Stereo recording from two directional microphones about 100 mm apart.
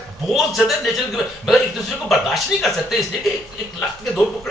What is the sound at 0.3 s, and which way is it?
A man's voice, 5° right (ahead or behind).